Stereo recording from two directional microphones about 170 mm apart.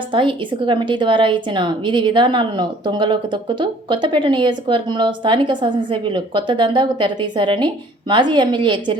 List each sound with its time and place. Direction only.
0.1 s a woman's voice: 30° right (ahead or behind)